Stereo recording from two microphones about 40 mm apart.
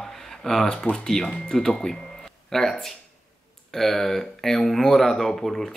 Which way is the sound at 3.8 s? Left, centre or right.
Centre.